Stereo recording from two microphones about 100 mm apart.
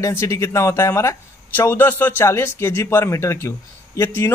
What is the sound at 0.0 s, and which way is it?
Speech, 30° left (ahead or behind).